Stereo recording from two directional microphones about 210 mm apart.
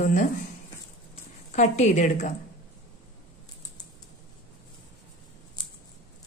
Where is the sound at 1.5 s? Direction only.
35° left (ahead or behind).